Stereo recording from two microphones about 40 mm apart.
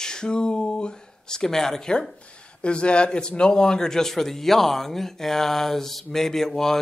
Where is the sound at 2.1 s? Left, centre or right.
Left.